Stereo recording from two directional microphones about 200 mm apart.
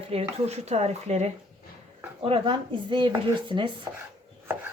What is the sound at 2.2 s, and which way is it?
Chopping, 25° right (ahead or behind).